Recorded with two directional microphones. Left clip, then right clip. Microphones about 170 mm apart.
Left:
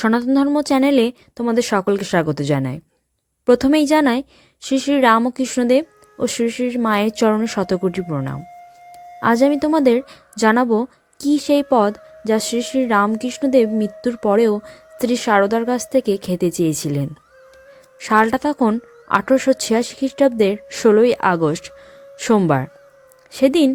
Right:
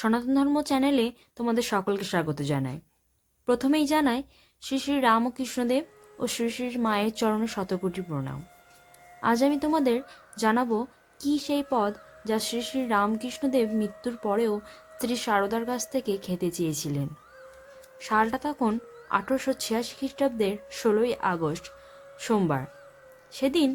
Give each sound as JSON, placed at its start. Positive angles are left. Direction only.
{"t": 0.0, "sound": "a woman's voice", "side_deg": 40}